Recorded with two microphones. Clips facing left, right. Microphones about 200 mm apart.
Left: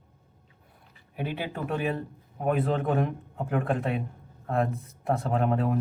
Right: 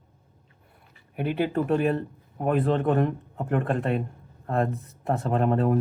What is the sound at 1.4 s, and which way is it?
A man's voice, 5° left (ahead or behind).